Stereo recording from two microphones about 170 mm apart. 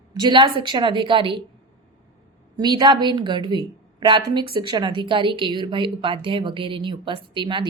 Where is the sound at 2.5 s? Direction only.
25° right (ahead or behind).